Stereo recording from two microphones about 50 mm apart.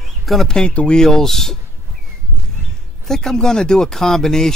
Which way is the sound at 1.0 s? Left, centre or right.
Centre.